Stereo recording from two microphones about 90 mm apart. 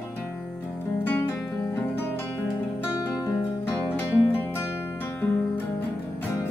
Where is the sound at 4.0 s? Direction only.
20° left (ahead or behind).